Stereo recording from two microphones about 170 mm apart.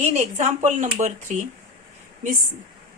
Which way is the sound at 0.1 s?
45° right (ahead or behind).